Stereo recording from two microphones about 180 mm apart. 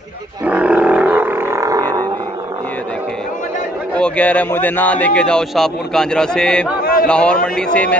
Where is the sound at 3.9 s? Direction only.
5° left (ahead or behind).